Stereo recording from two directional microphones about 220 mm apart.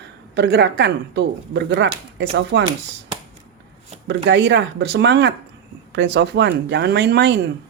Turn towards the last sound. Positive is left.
turn(degrees=-50)  # may be behind; listen again after turning